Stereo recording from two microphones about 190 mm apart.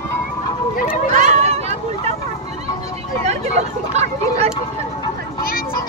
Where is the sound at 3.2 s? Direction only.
35° right (ahead or behind).